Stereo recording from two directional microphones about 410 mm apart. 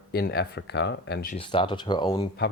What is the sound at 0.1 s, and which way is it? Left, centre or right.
Speech, left.